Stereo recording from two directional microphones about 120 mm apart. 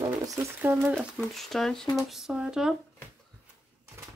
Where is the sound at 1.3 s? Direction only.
Centre (ahead or behind).